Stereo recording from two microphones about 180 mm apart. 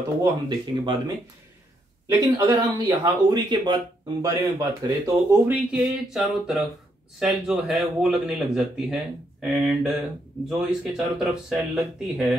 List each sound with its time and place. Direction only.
0.2 s speech: 25° right (ahead or behind)
2.4 s speech: 20° right (ahead or behind); by 12.3 s centre (ahead or behind)